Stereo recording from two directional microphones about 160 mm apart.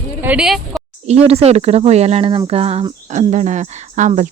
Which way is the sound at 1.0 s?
40° right (ahead or behind).